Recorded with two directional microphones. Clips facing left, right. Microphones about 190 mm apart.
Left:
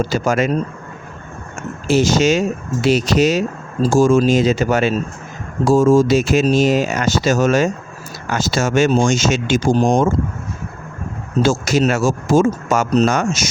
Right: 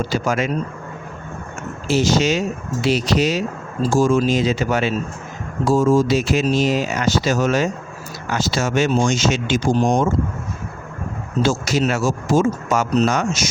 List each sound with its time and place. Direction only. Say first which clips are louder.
0.0 s speech: left 3 dB; 45° left (ahead or behind)
1.9 s speech: left 3 dB; 50° left (ahead or behind)
11.4 s speech: left 3 dB; 50° left (ahead or behind)